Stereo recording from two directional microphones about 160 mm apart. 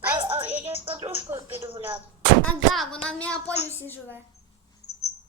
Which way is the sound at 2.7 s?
Centre (ahead or behind).